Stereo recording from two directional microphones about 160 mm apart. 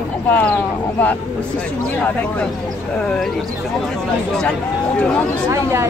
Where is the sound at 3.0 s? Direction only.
5° left (ahead or behind).